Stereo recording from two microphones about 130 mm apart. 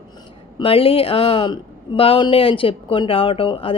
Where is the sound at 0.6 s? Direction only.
45° left (ahead or behind).